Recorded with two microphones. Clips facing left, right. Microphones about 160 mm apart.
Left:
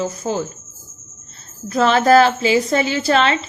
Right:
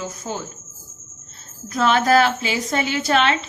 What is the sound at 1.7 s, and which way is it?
Speech, 35° left (ahead or behind).